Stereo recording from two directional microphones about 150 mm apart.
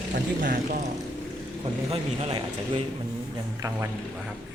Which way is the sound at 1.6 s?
40° right (ahead or behind).